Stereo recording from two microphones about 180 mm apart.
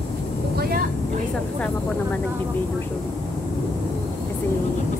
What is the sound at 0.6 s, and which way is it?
Vehicle, 60° right (ahead or behind).